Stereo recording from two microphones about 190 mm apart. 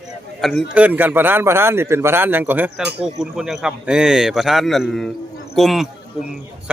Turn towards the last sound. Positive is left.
turn(degrees=0)  # may be behind; listen again after turning